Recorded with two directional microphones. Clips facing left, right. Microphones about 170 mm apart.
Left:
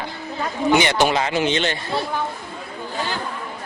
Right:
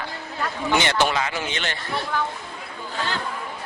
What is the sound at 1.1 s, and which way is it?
Speech, 30° left (ahead or behind).